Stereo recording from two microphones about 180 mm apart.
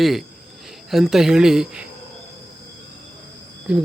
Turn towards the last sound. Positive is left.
turn(degrees=-5)  # may be behind; listen again after turning